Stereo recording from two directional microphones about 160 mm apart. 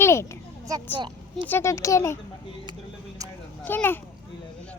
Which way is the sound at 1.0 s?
30° right (ahead or behind).